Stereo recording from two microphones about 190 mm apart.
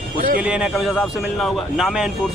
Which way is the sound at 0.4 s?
5° right (ahead or behind).